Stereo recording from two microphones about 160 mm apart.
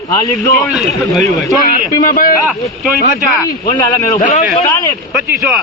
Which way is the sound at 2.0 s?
60° left (ahead or behind).